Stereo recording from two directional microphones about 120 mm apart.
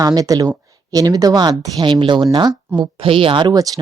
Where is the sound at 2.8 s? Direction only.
50° right (ahead or behind); by 3.8 s 35° right (ahead or behind).